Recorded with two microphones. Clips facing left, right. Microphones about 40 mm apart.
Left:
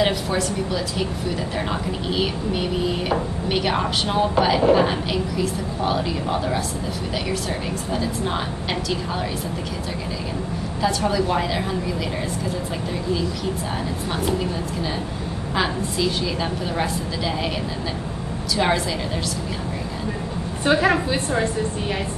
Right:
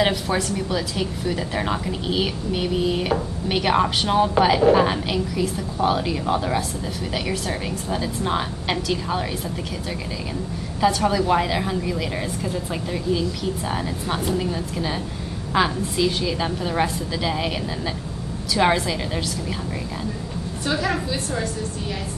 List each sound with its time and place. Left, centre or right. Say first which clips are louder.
0.0 s speech: even; centre
7.9 s speech: right 1 dB; centre
10.8 s speech: right 2 dB; centre
15.5 s speech: right 3 dB; centre
18.6 s speech: right 2 dB; centre
20.6 s a woman's voice: left 6 dB; left